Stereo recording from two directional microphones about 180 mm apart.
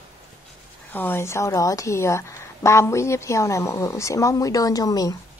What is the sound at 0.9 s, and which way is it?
A woman's voice, 10° left (ahead or behind).